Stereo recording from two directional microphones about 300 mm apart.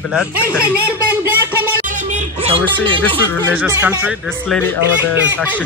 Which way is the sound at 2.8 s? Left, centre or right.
Centre.